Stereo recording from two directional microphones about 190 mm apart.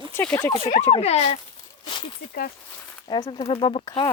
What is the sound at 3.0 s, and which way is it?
Speech, 25° left (ahead or behind).